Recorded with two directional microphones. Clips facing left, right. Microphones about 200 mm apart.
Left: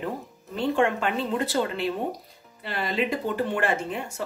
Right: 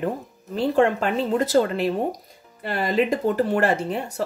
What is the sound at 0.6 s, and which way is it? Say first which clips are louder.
Speech: right 4 dB; 40° right (ahead or behind).